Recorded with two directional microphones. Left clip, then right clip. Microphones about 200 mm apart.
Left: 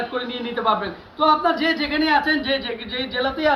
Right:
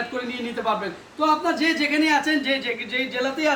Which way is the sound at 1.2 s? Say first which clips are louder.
Left 3 dB; 35° right (ahead or behind).